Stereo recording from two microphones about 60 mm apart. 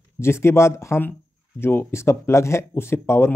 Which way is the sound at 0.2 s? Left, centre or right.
Left.